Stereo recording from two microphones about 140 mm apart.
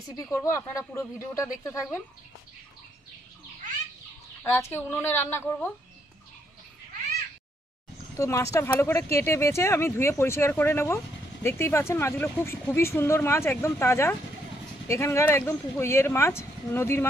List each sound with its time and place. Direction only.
0.2 s speech: 20° left (ahead or behind)
4.4 s speech: 15° left (ahead or behind)
8.2 s speech: 20° left (ahead or behind)